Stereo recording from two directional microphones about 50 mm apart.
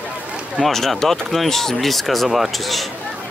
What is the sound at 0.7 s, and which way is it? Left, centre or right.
Speech, centre.